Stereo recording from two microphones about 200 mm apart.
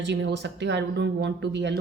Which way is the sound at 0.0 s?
60° right (ahead or behind).